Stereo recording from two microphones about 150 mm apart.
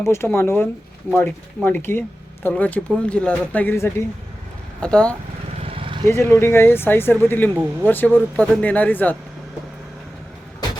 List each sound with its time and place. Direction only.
0.0 s speech: 15° left (ahead or behind)
5.5 s vehicle: 40° right (ahead or behind)
6.1 s speech: 20° left (ahead or behind)